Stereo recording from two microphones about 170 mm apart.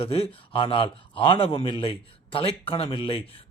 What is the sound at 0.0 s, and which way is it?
A man's voice, 35° left (ahead or behind).